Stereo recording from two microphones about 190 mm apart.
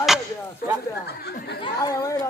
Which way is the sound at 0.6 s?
50° left (ahead or behind).